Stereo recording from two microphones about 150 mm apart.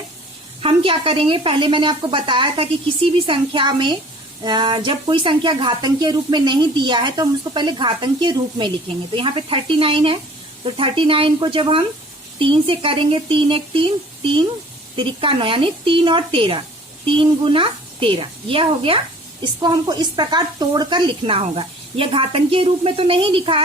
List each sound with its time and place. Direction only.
0.6 s speech: 35° right (ahead or behind)